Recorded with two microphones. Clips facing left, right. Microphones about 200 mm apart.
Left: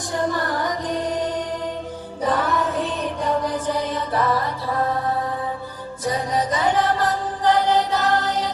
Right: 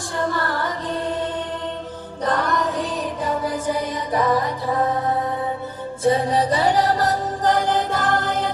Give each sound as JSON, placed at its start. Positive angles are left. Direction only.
{"t": 0.1, "sound": "music", "side_deg": 15}